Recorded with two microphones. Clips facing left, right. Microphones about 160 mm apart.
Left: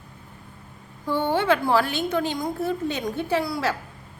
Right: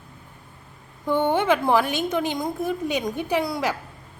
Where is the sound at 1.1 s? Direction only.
15° right (ahead or behind).